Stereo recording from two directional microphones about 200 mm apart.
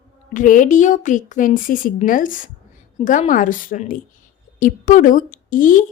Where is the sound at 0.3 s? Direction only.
40° left (ahead or behind).